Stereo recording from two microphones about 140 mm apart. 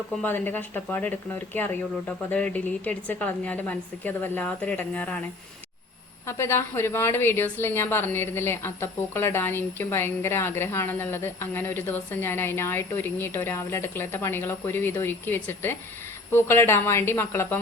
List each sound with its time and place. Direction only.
0.2 s speech: 15° left (ahead or behind)
6.2 s speech: 20° left (ahead or behind)